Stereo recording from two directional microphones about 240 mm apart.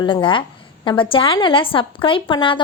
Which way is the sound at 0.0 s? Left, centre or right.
Centre.